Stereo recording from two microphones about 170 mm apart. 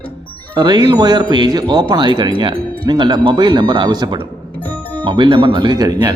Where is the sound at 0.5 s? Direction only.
25° right (ahead or behind).